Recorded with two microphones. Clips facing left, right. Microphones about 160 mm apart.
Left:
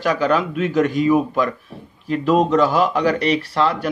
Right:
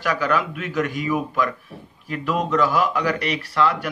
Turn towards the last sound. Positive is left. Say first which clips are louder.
# left 2 dB
turn(degrees=30)  # may be behind; listen again after turning